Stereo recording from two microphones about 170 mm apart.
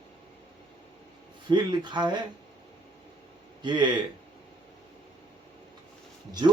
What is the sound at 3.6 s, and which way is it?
Speech, 25° right (ahead or behind).